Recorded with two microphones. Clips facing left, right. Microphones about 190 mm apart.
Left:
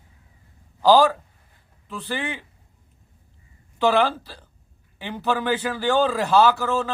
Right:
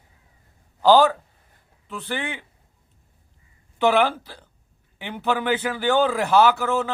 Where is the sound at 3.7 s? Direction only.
15° right (ahead or behind).